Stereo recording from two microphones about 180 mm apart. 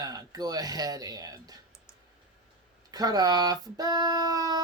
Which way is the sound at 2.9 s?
20° right (ahead or behind).